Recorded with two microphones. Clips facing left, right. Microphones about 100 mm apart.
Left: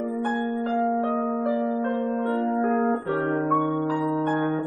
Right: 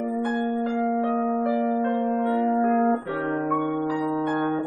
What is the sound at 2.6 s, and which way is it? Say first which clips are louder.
Music: right 1 dB; 20° left (ahead or behind).